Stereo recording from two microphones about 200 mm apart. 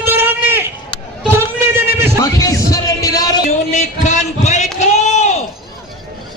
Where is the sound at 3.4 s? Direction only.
35° left (ahead or behind).